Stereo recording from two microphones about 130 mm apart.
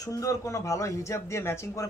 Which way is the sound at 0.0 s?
25° left (ahead or behind).